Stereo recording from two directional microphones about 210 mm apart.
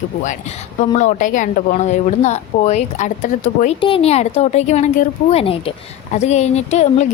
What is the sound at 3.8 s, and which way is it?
Speech, 25° left (ahead or behind).